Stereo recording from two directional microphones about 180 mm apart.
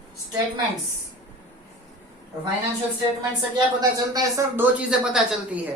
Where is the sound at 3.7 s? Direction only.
20° right (ahead or behind); by 5.4 s 5° right (ahead or behind).